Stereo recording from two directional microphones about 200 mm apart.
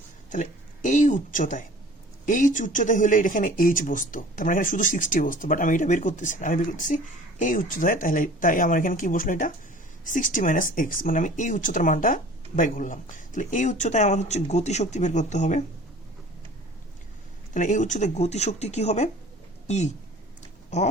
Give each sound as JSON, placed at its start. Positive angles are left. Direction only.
{"t": 0.3, "sound": "speech", "side_deg": 40}
{"t": 17.5, "sound": "speech", "side_deg": 40}